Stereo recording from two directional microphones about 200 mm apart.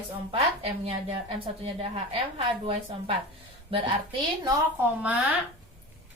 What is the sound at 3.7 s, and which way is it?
Speech, 25° right (ahead or behind).